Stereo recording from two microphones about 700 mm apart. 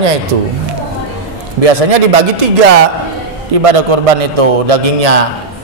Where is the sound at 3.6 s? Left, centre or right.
Right.